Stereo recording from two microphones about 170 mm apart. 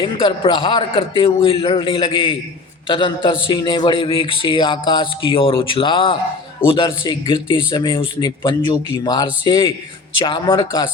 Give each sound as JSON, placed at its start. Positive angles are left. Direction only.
{"t": 0.0, "sound": "a man's voice", "side_deg": 30}